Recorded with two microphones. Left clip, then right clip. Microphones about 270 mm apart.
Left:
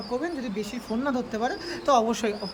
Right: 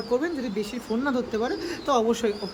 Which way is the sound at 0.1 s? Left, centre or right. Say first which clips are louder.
Right 4 dB; centre.